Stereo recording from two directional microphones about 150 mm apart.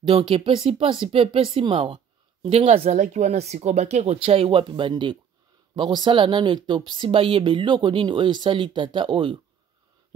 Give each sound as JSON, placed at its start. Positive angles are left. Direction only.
{"t": 0.0, "sound": "speech", "side_deg": -35}